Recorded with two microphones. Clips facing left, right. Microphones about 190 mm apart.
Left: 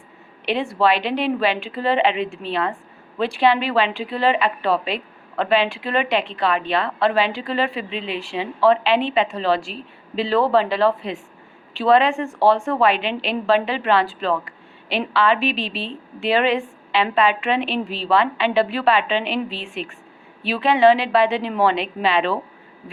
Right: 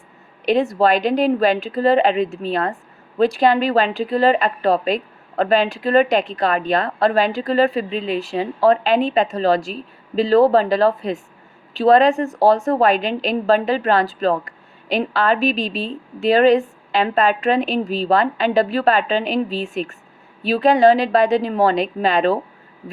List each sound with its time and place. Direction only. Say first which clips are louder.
0.4 s a woman's voice: right 3 dB; 40° right (ahead or behind)